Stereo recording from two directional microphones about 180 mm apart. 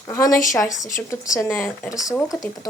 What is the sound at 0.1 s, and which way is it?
A woman's voice, 20° left (ahead or behind).